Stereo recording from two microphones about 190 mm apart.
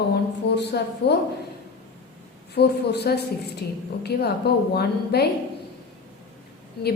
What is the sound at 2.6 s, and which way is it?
Speech, 60° left (ahead or behind).